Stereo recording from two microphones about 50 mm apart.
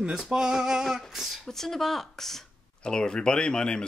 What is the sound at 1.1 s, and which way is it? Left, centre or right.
Speech, centre.